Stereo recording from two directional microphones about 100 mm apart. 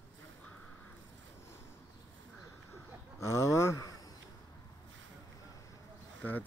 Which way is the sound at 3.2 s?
30° left (ahead or behind).